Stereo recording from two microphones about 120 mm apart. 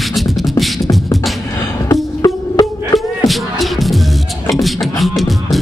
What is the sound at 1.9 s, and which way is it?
Music, 30° left (ahead or behind).